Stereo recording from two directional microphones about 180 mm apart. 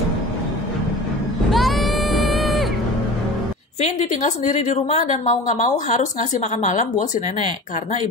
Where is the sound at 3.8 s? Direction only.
40° left (ahead or behind).